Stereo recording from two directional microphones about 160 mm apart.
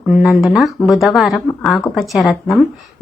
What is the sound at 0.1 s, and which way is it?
A woman's voice, centre (ahead or behind).